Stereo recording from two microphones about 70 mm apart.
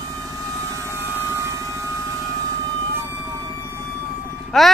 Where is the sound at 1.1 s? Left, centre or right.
Right.